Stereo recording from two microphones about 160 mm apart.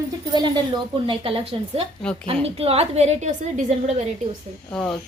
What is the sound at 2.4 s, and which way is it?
A woman's voice, 40° right (ahead or behind).